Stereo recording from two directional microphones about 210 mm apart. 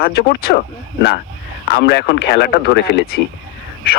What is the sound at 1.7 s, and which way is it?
Speech, 50° left (ahead or behind).